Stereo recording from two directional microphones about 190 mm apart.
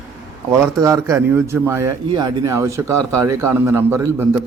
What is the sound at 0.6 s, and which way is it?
A man's voice, 15° right (ahead or behind).